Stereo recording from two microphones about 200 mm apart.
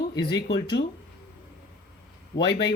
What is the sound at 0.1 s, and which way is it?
Speech, 60° left (ahead or behind).